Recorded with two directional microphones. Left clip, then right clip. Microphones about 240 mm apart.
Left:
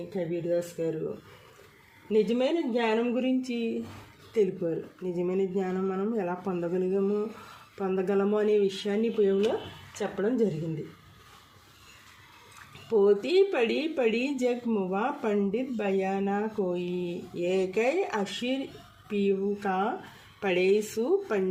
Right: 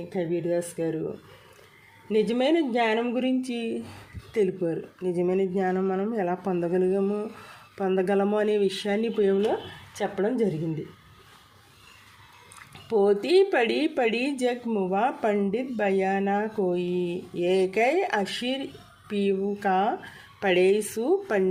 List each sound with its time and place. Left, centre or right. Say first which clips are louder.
0.3 s speech: right 1 dB; right
2.0 s speech: right 2 dB; right
12.9 s speech: right 2 dB; right